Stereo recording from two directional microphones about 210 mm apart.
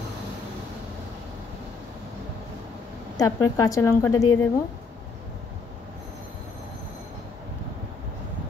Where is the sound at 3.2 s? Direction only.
15° left (ahead or behind).